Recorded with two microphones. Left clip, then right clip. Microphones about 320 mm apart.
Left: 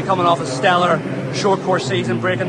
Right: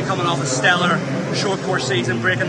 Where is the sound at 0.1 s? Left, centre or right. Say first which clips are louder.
Left 6 dB; centre.